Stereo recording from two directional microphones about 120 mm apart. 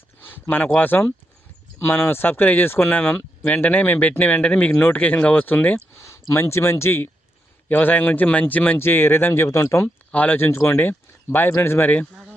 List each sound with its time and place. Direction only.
0.2 s speech: 15° left (ahead or behind)